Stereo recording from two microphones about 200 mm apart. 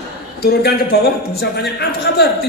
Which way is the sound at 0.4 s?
55° left (ahead or behind).